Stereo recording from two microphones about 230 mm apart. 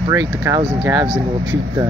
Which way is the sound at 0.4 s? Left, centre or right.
Centre.